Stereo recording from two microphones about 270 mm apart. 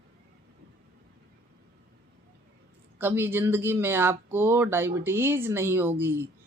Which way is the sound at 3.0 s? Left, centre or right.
Centre.